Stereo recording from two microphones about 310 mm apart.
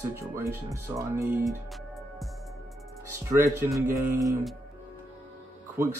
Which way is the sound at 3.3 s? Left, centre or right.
Centre.